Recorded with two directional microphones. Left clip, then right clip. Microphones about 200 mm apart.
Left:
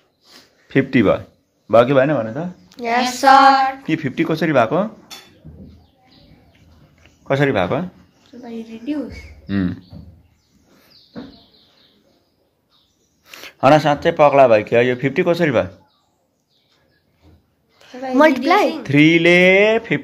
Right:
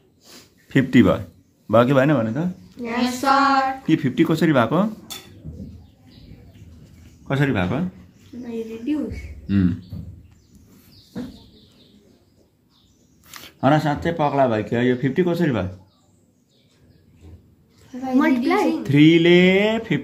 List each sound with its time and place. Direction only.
0.7 s speech: centre (ahead or behind)
2.7 s speech: 50° left (ahead or behind)
3.0 s female singing: 35° left (ahead or behind)
3.8 s speech: centre (ahead or behind)
7.2 s speech: 20° left (ahead or behind)
8.9 s a woman's voice: 45° left (ahead or behind)
13.4 s speech: 15° left (ahead or behind)
18.1 s a woman's voice: 50° left (ahead or behind)
18.8 s a sound: 10° left (ahead or behind)